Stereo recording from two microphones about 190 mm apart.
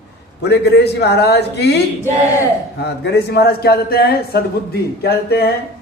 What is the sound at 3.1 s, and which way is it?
Speech, 55° left (ahead or behind).